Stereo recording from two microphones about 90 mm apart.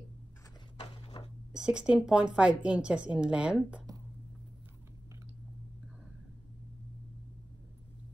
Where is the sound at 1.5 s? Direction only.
10° right (ahead or behind).